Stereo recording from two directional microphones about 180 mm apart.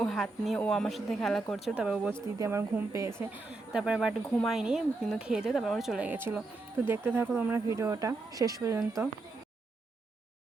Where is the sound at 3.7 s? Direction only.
5° right (ahead or behind).